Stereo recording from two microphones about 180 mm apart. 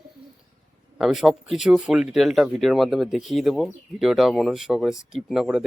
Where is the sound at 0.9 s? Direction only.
Centre (ahead or behind).